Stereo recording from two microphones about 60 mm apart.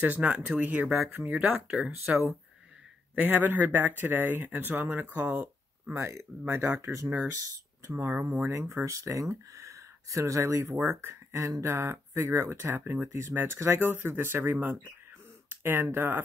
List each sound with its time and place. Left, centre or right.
0.0 s speech: right
0.8 s speech: centre
1.3 s speech: centre
3.2 s speech: right
5.1 s a sound: right
5.9 s speech: right
8.1 s speech: right
8.5 s speech: right